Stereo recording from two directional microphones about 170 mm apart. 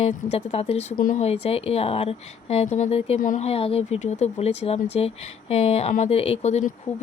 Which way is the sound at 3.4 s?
35° left (ahead or behind).